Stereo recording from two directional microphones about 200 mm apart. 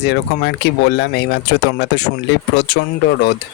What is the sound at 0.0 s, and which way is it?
Speech, 55° left (ahead or behind).